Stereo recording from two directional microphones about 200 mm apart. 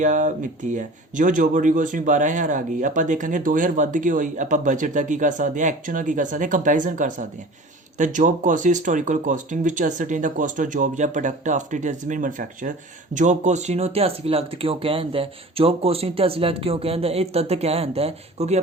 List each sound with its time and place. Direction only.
0.0 s speech: 40° right (ahead or behind)